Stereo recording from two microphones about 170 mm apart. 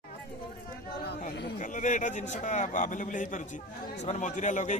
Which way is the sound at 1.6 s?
50° left (ahead or behind).